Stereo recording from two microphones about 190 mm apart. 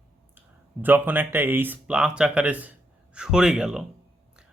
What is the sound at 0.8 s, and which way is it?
Speech, 10° right (ahead or behind).